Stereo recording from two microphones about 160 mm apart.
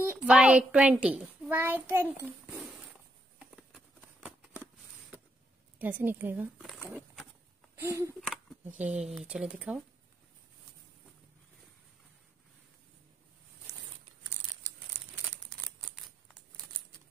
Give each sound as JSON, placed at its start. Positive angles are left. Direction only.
{"t": 0.0, "sound": "a child's voice", "side_deg": -5}
{"t": 3.3, "sound": "a sound", "side_deg": -5}
{"t": 5.8, "sound": "a woman's voice", "side_deg": -10}
{"t": 7.7, "sound": "speech", "side_deg": -15}
{"t": 8.2, "sound": "a sound", "side_deg": 0}
{"t": 8.6, "sound": "a woman's voice", "side_deg": -10}